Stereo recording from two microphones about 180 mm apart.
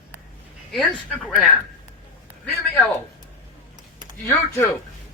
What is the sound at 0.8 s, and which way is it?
Speech, centre (ahead or behind).